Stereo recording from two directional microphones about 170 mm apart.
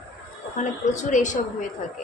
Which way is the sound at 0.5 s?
45° left (ahead or behind).